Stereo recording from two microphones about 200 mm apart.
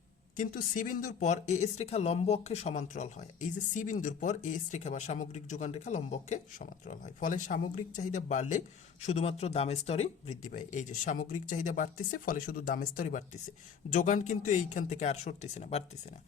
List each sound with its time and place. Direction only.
0.3 s speech: 40° left (ahead or behind)